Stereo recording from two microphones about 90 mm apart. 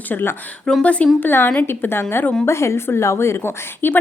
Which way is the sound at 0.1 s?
25° left (ahead or behind).